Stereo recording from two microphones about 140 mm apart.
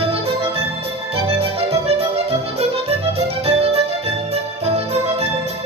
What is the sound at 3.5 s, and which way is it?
Music, 45° right (ahead or behind).